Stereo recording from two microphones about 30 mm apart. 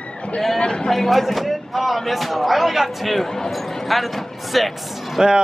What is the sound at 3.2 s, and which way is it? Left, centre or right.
Speech, centre.